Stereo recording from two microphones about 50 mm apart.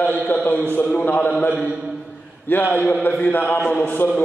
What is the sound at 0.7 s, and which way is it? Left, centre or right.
Speech, left.